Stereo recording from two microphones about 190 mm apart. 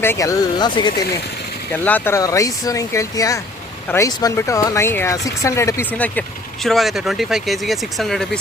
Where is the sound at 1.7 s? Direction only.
10° left (ahead or behind).